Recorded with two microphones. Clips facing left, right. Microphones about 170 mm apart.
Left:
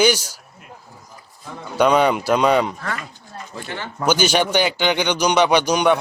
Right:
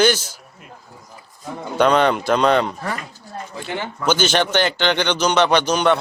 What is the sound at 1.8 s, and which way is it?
Speech, 10° left (ahead or behind).